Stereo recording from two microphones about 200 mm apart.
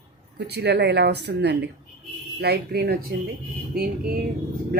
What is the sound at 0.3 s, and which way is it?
A woman's voice, 55° right (ahead or behind).